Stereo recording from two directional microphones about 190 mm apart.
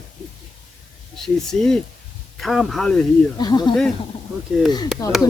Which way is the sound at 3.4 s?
20° left (ahead or behind).